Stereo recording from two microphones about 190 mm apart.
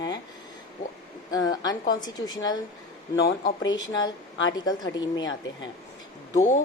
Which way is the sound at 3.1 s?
55° left (ahead or behind).